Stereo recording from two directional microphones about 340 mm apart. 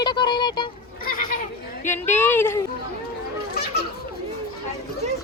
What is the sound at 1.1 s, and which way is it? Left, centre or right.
Children playing, left.